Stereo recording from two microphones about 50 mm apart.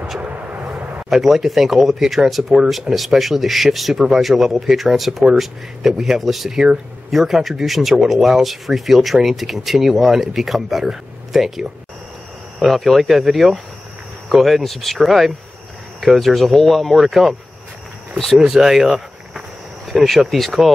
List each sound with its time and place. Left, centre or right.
0.2 s vehicle: right
1.1 s speech: centre
18.1 s speech: centre
18.4 s speech: centre